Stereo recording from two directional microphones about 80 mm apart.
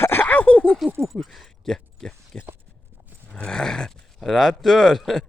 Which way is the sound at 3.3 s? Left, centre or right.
Centre.